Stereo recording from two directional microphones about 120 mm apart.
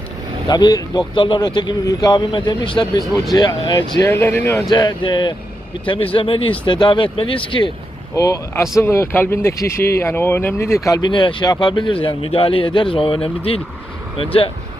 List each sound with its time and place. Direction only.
0.4 s speech: 35° left (ahead or behind)
4.1 s speech: 20° left (ahead or behind)
4.7 s speech: 35° left (ahead or behind)
8.1 s speech: 25° left (ahead or behind)
10.8 s speech: 35° left (ahead or behind); by 13.6 s 50° left (ahead or behind)